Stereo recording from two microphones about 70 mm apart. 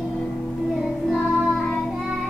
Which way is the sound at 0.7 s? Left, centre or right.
Centre.